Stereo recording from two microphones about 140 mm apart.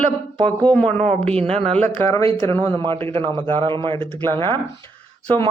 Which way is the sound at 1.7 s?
15° left (ahead or behind).